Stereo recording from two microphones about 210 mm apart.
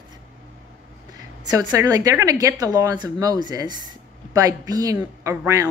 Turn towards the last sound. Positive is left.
turn(degrees=-15)  # may be behind; listen again after turning